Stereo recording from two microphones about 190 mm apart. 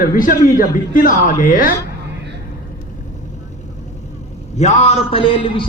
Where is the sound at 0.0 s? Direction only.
45° left (ahead or behind).